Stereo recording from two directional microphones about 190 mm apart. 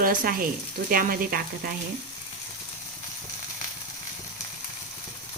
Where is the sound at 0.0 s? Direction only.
45° right (ahead or behind).